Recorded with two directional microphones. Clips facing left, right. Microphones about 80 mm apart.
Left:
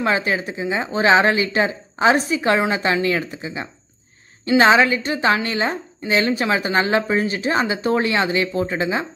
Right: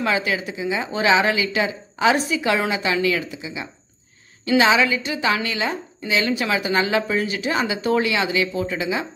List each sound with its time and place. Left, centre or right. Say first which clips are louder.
0.0 s a woman's voice: left 2 dB; left